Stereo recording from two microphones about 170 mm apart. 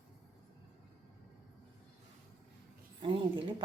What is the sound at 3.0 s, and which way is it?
Speech, 30° right (ahead or behind).